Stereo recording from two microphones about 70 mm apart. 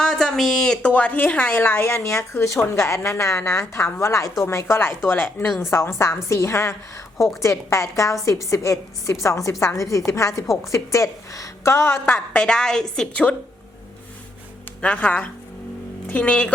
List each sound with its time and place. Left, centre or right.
0.0 s a woman's voice: centre; by 11.9 s left
12.0 s a woman's voice: left
12.4 s a woman's voice: centre
14.8 s a woman's voice: centre